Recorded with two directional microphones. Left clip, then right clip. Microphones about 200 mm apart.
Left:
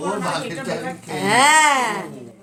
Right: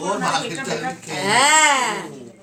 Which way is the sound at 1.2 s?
55° left (ahead or behind).